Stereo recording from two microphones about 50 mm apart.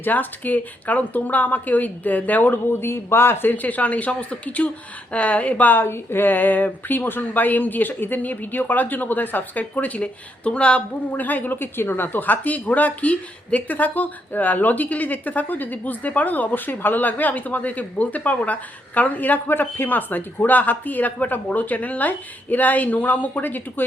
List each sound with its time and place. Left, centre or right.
0.0 s a woman's voice: left
3.5 s speech: left
5.8 s a woman's voice: left
11.1 s a woman's voice: left